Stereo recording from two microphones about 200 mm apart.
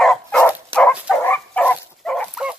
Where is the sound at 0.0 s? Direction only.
Centre (ahead or behind).